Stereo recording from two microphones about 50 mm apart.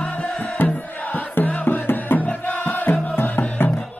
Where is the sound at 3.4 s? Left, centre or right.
Left.